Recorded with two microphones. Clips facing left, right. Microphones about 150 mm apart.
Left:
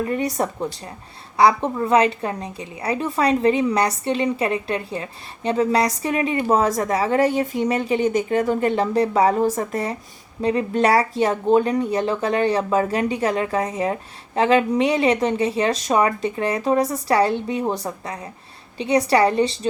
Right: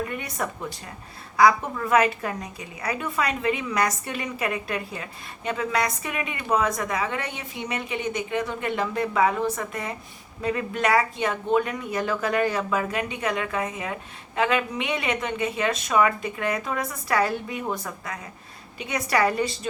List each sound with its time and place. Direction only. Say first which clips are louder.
0.0 s a woman's voice: left 7 dB; 35° left (ahead or behind)